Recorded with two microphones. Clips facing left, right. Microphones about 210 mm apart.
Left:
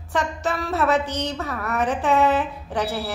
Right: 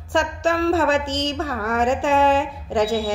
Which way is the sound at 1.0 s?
90° right.